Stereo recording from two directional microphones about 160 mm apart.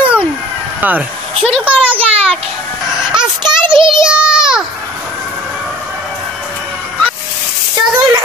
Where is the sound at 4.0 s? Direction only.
5° right (ahead or behind).